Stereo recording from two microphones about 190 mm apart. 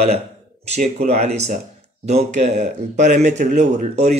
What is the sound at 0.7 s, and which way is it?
Speech, 35° right (ahead or behind).